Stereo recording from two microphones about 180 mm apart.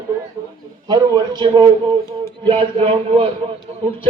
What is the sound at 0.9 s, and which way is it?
A man's voice, 25° right (ahead or behind).